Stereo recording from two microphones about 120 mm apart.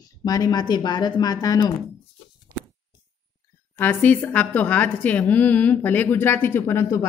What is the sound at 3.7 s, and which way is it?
A woman's voice, 15° left (ahead or behind).